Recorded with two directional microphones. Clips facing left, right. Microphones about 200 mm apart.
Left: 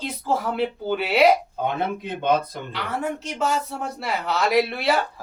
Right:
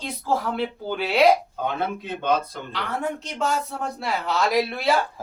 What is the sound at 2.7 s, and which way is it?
Speech, 5° left (ahead or behind).